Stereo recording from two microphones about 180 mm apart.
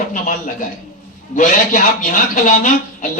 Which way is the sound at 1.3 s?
45° left (ahead or behind).